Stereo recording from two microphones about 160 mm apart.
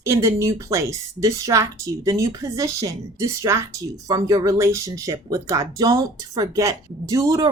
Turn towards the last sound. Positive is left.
turn(degrees=-20)  # may be behind; listen again after turning